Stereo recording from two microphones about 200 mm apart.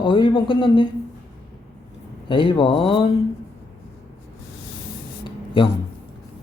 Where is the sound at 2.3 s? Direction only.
25° left (ahead or behind).